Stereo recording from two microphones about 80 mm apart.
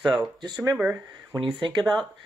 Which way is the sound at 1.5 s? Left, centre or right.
Right.